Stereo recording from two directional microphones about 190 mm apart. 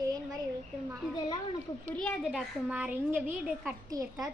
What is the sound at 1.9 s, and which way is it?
Speech, 5° left (ahead or behind).